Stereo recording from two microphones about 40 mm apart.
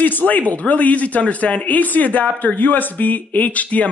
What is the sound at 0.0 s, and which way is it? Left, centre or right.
Speech, left.